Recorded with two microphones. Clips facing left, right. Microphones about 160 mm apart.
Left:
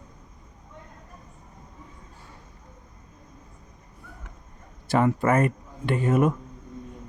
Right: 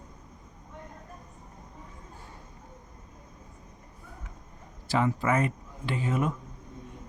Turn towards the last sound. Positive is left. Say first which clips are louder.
# left 7 dB
turn(degrees=55)  # may be behind; listen again after turning